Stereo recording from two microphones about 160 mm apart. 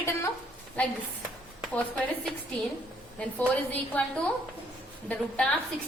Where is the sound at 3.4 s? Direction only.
10° left (ahead or behind).